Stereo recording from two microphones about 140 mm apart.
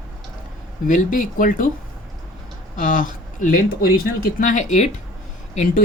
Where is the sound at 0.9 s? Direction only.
70° left (ahead or behind).